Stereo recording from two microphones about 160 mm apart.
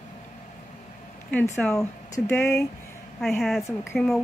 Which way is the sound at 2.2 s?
15° left (ahead or behind).